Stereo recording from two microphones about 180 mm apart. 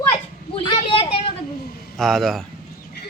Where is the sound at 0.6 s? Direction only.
30° left (ahead or behind).